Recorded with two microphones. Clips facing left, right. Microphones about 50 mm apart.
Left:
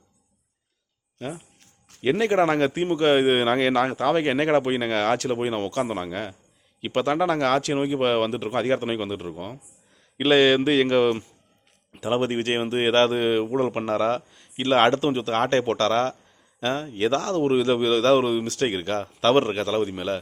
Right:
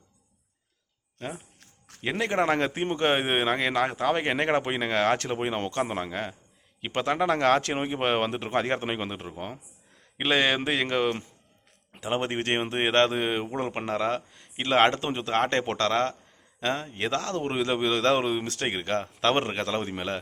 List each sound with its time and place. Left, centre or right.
2.0 s speech: centre
7.3 s speech: centre